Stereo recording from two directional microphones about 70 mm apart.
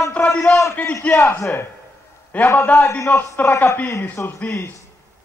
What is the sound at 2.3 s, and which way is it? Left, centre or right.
Speech, centre.